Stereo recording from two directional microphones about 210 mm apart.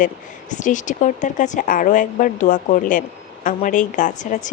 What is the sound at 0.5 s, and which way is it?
A woman's voice, 35° left (ahead or behind).